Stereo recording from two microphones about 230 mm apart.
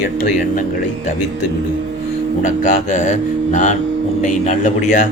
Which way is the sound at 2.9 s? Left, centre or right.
Left.